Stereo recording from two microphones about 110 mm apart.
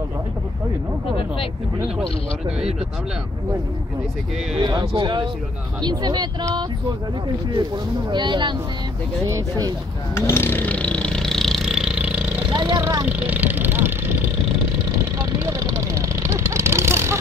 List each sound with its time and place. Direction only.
4.6 s speech: 45° right (ahead or behind)
8.1 s speech: 45° right (ahead or behind)
10.1 s a sound: 25° left (ahead or behind); by 12.4 s 10° right (ahead or behind)
12.4 s vehicle: 40° right (ahead or behind)
13.0 s vehicle: 15° right (ahead or behind)
14.9 s vehicle: 30° right (ahead or behind)